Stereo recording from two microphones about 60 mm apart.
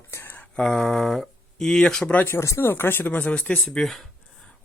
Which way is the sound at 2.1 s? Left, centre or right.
Left.